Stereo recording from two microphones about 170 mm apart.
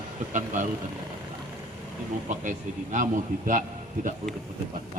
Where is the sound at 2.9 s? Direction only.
50° right (ahead or behind).